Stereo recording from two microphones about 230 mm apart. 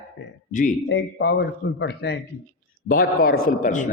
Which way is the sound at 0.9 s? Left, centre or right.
Left.